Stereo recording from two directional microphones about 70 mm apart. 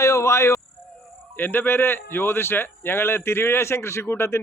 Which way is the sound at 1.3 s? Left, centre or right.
Left.